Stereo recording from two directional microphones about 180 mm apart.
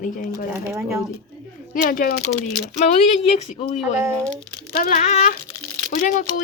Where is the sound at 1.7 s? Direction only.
50° left (ahead or behind).